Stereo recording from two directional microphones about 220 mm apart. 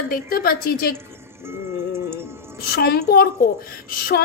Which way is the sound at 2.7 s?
45° left (ahead or behind).